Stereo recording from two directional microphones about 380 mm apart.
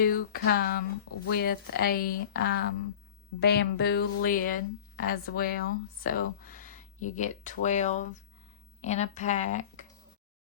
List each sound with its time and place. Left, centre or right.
0.0 s speech: left